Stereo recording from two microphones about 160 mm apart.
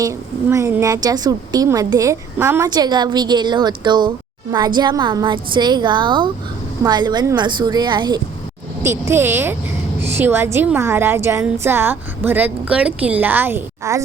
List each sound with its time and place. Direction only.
0.0 s a woman's voice: 20° right (ahead or behind)
8.8 s a woman's voice: 15° right (ahead or behind)